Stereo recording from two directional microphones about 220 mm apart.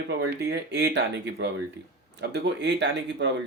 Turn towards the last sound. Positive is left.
turn(degrees=-50)  # may be behind; listen again after turning